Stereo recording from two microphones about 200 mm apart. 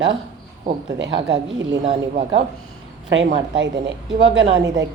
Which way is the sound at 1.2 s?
60° right (ahead or behind).